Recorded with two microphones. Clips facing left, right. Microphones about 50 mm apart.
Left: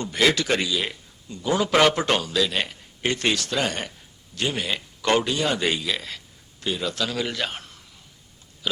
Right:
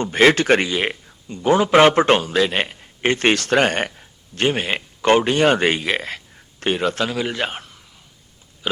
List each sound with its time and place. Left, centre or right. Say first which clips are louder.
0.0 s a man's voice: right 7 dB; right
7.1 s speech: right 4 dB; centre
7.3 s a man's voice: right 4 dB; right
8.6 s a man's voice: right 4 dB; right